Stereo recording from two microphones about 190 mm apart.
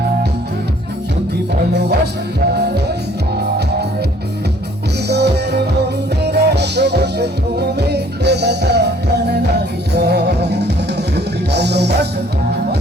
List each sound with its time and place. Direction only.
1.7 s music: 60° right (ahead or behind)
5.0 s music: 60° right (ahead or behind)